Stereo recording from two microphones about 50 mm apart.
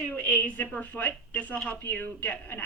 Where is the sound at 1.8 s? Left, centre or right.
Left.